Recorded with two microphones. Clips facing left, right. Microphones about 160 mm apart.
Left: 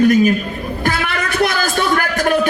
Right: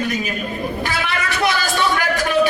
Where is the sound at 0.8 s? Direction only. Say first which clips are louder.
Left 3 dB; 50° left (ahead or behind).